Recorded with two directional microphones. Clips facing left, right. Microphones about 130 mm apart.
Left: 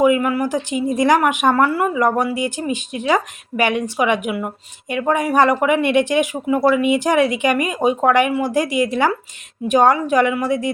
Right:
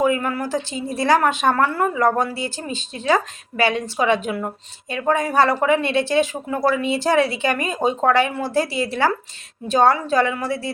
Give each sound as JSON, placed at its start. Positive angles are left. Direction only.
{"t": 0.0, "sound": "a woman's voice", "side_deg": 10}